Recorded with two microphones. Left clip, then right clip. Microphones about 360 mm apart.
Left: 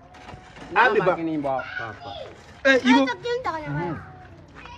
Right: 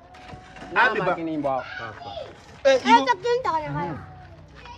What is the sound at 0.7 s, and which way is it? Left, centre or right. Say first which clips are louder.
Speech: left 2 dB; centre.